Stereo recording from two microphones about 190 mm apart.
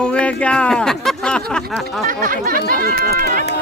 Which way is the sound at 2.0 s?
45° right (ahead or behind).